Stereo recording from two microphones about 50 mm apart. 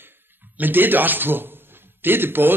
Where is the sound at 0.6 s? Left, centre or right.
Right.